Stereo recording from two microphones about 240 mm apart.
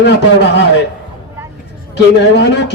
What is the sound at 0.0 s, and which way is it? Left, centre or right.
Speech, left.